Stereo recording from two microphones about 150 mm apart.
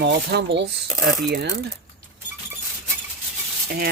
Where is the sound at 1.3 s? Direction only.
80° right.